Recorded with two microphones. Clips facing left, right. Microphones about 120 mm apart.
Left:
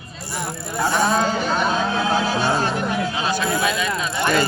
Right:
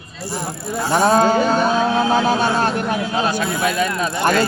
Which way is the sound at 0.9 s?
40° right (ahead or behind).